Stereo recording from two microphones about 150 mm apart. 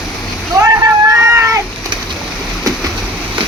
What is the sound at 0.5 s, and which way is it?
Splash, 25° right (ahead or behind).